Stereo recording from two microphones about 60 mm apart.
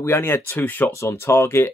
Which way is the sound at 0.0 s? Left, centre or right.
Left.